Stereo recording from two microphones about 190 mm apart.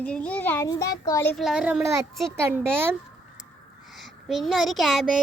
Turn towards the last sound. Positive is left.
turn(degrees=0)  # may be behind; listen again after turning